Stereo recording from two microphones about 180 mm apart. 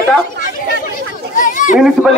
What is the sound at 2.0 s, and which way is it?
Speech, 10° right (ahead or behind).